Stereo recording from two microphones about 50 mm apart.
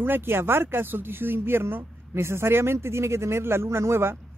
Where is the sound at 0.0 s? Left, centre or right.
Right.